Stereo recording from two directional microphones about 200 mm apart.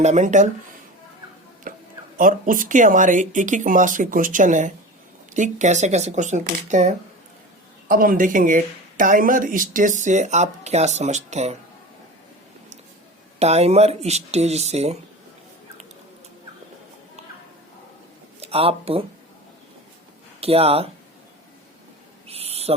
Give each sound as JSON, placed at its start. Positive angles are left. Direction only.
{"t": 0.0, "sound": "speech", "side_deg": -35}
{"t": 1.7, "sound": "a sound", "side_deg": -45}
{"t": 2.1, "sound": "speech", "side_deg": -45}
{"t": 13.4, "sound": "speech", "side_deg": -35}
{"t": 18.3, "sound": "speech", "side_deg": -30}
{"t": 20.4, "sound": "speech", "side_deg": -30}
{"t": 22.3, "sound": "owl", "side_deg": -30}